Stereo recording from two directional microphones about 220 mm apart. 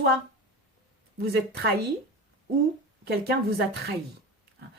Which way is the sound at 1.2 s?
45° right (ahead or behind).